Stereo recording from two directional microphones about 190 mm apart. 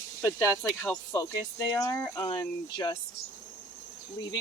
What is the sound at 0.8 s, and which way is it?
Speech, 10° left (ahead or behind).